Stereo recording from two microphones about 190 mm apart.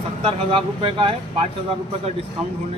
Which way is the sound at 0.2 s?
30° right (ahead or behind).